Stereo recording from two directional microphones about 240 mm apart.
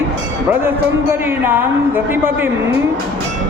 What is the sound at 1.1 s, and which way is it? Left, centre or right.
A man's voice, centre.